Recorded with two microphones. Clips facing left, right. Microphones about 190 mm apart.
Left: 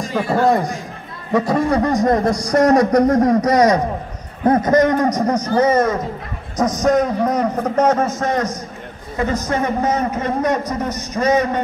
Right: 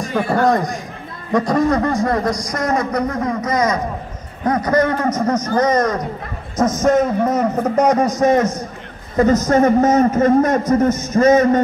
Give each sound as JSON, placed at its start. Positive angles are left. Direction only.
{"t": 0.1, "sound": "a man's voice", "side_deg": 0}
{"t": 2.3, "sound": "a man's voice", "side_deg": 35}
{"t": 4.5, "sound": "a man's voice", "side_deg": 25}
{"t": 9.1, "sound": "a man's voice", "side_deg": -40}